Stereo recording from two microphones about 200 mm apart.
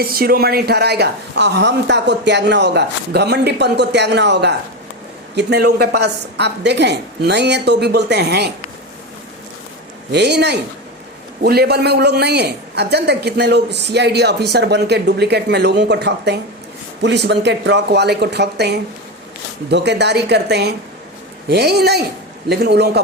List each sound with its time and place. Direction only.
0.0 s a man's voice: 50° right (ahead or behind)
10.1 s a man's voice: 55° right (ahead or behind)